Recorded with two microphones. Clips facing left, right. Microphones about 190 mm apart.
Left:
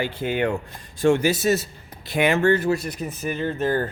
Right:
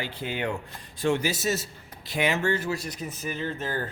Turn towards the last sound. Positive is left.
turn(degrees=55)  # may be behind; listen again after turning